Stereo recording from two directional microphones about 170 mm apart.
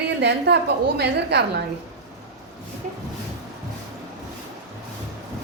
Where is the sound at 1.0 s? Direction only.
75° right (ahead or behind).